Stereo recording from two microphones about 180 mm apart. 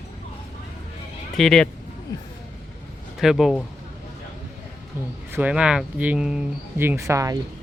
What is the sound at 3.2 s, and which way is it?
Speech, centre (ahead or behind).